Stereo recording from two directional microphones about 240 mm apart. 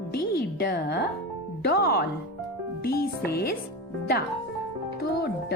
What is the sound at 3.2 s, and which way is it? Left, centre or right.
Music, left.